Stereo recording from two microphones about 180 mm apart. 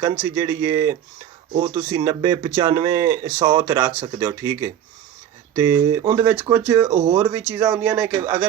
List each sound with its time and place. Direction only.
0.0 s speech: 15° right (ahead or behind)